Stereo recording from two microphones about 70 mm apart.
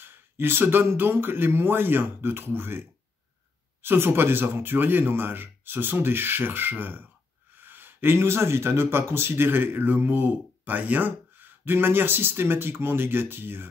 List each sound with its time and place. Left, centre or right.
0.0 s speech: right